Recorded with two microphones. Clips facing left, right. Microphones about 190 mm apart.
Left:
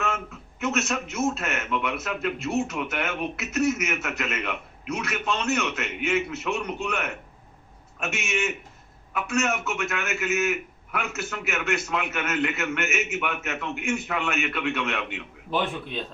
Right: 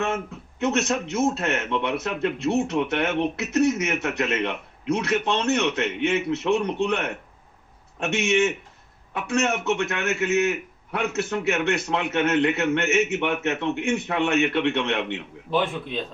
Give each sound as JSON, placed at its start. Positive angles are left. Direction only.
{"t": 0.6, "sound": "a man's voice", "side_deg": -30}